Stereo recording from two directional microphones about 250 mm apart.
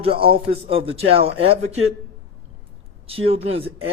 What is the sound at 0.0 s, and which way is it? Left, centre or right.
Speech, right.